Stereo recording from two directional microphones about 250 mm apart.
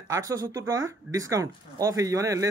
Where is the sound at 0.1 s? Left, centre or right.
Centre.